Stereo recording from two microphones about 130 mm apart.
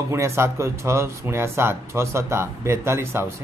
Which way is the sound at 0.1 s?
20° right (ahead or behind).